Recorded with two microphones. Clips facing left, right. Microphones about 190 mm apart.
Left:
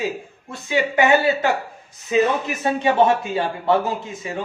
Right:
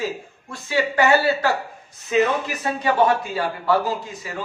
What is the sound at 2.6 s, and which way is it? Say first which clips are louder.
A man's voice: left 3 dB; 25° left (ahead or behind).